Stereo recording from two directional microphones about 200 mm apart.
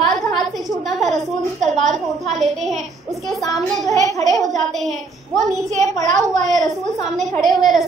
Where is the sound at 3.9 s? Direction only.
15° left (ahead or behind).